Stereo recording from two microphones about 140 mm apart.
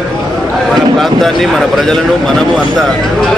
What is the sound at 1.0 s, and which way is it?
Speech, centre (ahead or behind).